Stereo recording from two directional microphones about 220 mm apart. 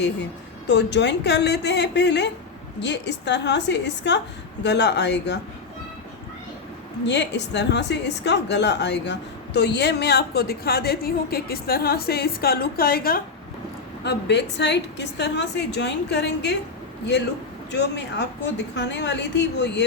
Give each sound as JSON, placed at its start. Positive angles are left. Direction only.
{"t": 0.7, "sound": "a woman's voice", "side_deg": 50}
{"t": 7.0, "sound": "a woman's voice", "side_deg": 50}
{"t": 17.7, "sound": "a woman's voice", "side_deg": 50}